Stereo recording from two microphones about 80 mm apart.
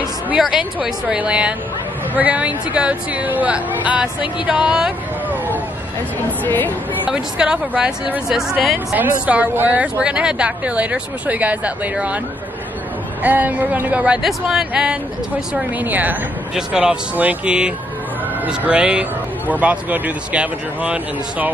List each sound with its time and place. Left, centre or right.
0.4 s speech: centre
5.3 s a sound: right
6.4 s speech: left
7.1 s speech: centre
8.7 s speech: right
13.2 s speech: right
15.5 s speech: right
16.5 s speech: centre